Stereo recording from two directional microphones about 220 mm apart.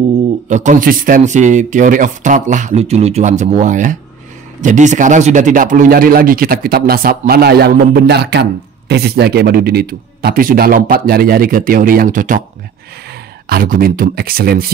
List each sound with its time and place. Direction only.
0.5 s a man's voice: 35° right (ahead or behind)
13.5 s speech: 40° right (ahead or behind)